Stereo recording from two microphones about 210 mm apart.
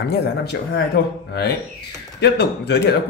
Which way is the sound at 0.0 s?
50° left (ahead or behind).